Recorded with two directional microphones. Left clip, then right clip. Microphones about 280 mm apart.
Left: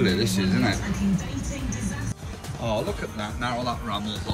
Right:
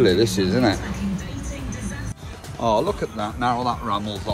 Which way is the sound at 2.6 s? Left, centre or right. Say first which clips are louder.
Right 7 dB; centre.